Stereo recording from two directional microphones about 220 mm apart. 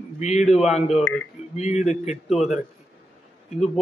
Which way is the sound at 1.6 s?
30° left (ahead or behind).